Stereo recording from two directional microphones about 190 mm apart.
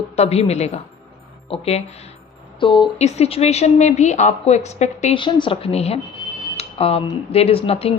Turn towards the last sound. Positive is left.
turn(degrees=30)  # may be behind; listen again after turning